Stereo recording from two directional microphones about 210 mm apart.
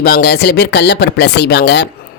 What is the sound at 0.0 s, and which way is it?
Speech, 50° left (ahead or behind).